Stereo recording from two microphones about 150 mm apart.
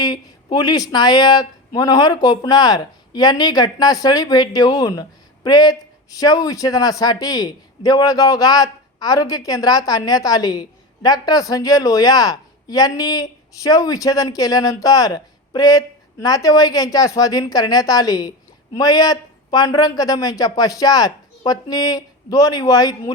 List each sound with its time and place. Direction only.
0.0 s speech: 25° left (ahead or behind)